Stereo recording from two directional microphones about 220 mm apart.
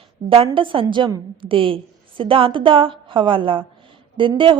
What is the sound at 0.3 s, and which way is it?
A woman's voice, 25° right (ahead or behind).